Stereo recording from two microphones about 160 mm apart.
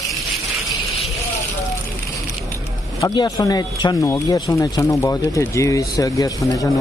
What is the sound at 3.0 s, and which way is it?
Speech, 25° left (ahead or behind).